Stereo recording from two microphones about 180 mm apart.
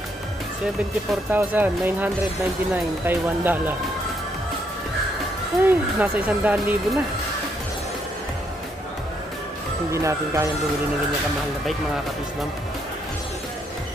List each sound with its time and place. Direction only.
1.3 s speech: 10° right (ahead or behind)
5.6 s speech: 10° right (ahead or behind)
9.8 s speech: 15° right (ahead or behind)